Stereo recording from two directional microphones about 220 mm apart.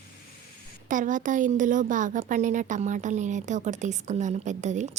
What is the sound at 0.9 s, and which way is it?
A woman's voice, 35° right (ahead or behind).